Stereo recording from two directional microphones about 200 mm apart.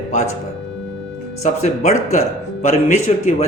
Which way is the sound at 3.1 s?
30° left (ahead or behind).